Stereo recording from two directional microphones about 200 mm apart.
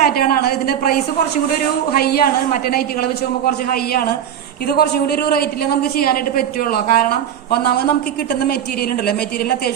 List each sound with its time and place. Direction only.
0.0 s a woman's voice: 45° left (ahead or behind)
1.9 s a woman's voice: 50° left (ahead or behind)
4.7 s a woman's voice: 50° left (ahead or behind)